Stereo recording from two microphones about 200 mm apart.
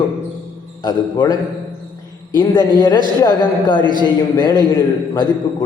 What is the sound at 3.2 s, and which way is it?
A man's voice, 25° left (ahead or behind).